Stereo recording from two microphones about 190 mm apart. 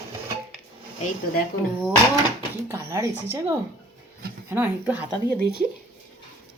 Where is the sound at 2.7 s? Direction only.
15° right (ahead or behind).